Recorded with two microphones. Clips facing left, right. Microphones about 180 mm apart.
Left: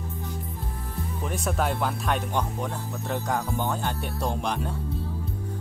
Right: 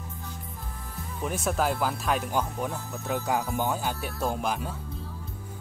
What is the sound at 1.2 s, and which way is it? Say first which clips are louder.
Speech: right 1 dB; centre (ahead or behind).